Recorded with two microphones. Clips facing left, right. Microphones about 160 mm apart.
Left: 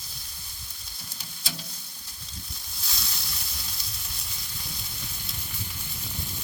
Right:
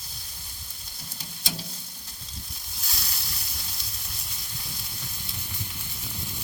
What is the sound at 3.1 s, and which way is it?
Sizzle, centre (ahead or behind).